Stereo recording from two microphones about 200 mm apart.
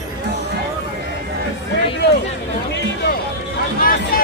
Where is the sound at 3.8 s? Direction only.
45° left (ahead or behind).